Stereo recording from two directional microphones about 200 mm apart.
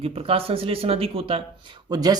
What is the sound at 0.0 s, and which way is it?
Speech, 30° right (ahead or behind).